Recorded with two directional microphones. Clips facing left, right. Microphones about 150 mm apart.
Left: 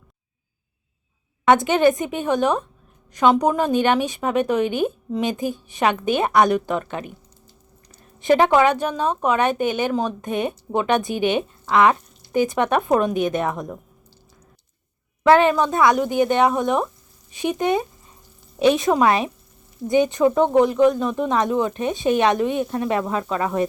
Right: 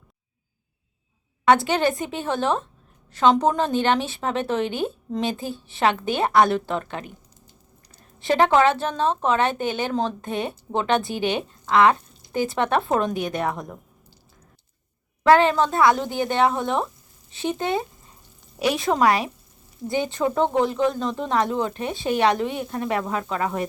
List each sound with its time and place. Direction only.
1.5 s a woman's voice: 20° left (ahead or behind)
8.2 s a woman's voice: 15° left (ahead or behind)
15.3 s a woman's voice: 15° left (ahead or behind)